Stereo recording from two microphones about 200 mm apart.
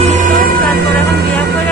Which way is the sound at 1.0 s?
55° right (ahead or behind).